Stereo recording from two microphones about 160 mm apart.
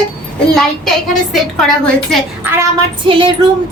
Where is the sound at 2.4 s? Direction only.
15° right (ahead or behind).